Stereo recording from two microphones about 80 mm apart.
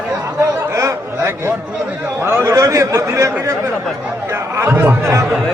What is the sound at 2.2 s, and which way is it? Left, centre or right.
A man's voice, right.